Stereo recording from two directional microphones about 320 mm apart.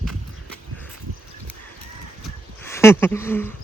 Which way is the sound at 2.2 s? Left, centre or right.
Centre.